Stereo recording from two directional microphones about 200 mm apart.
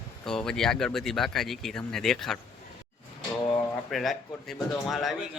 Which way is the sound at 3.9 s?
Centre (ahead or behind).